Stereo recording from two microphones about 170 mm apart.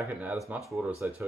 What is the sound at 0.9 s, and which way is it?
Speech, 15° right (ahead or behind).